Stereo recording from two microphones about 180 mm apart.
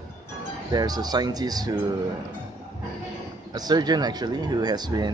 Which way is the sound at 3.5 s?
20° right (ahead or behind).